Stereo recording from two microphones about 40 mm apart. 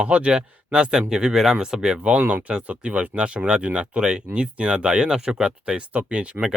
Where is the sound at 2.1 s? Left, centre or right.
Right.